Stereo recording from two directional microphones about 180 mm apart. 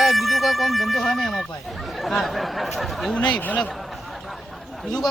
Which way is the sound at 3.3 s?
5° left (ahead or behind).